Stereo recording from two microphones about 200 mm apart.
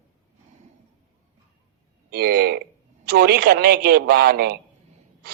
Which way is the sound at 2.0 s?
50° right (ahead or behind).